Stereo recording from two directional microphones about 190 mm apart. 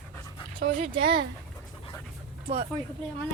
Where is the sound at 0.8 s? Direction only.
30° right (ahead or behind).